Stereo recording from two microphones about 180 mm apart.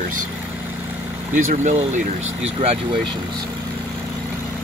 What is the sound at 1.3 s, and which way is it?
Speech, 45° right (ahead or behind).